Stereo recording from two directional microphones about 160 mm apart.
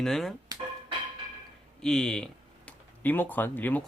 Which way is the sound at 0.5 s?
20° right (ahead or behind).